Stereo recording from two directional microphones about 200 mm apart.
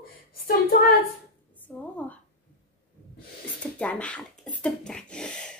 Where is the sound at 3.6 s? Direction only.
5° left (ahead or behind).